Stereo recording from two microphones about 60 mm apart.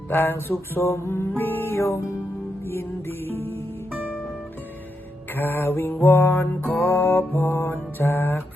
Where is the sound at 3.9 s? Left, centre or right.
Right.